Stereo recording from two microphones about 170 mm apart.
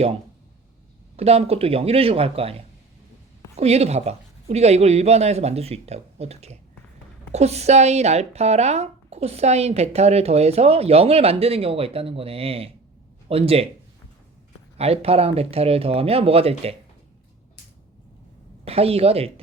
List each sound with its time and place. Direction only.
1.1 s speech: 35° right (ahead or behind)
14.8 s speech: 35° right (ahead or behind)
18.6 s speech: 35° right (ahead or behind)